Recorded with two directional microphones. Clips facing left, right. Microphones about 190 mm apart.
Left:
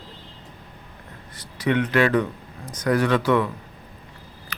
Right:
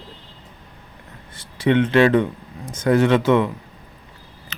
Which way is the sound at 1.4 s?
25° right (ahead or behind).